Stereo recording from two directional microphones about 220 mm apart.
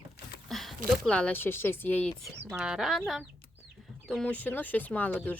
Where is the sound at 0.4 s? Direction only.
Centre (ahead or behind).